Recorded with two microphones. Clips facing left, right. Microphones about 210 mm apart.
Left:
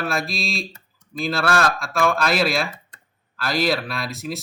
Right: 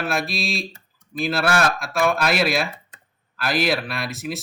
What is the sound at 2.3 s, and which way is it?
Speech, centre (ahead or behind).